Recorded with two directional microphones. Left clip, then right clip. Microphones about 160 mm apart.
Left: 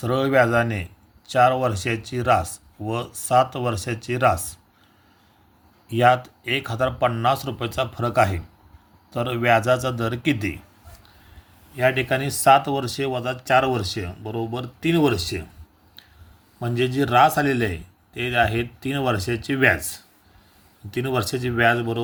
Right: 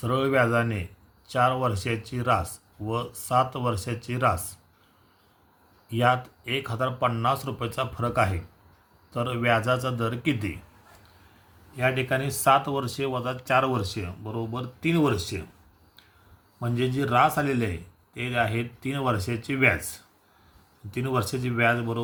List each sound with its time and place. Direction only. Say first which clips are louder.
0.0 s speech: left 4 dB; 30° left (ahead or behind)
5.9 s speech: left 6 dB; 30° left (ahead or behind)
11.8 s speech: left 5 dB; 40° left (ahead or behind)
16.6 s speech: left 5 dB; 40° left (ahead or behind)